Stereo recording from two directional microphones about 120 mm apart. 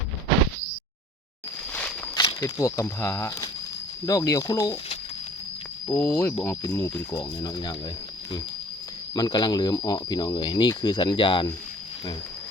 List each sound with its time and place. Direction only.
2.1 s speech: 35° left (ahead or behind)
5.9 s speech: 20° left (ahead or behind); by 7.8 s 35° left (ahead or behind)
9.1 s speech: 35° left (ahead or behind)